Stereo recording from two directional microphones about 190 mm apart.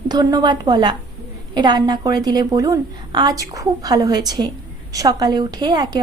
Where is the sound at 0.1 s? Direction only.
20° right (ahead or behind).